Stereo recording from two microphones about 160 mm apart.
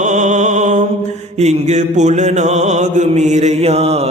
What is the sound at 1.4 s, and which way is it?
Music, 45° right (ahead or behind).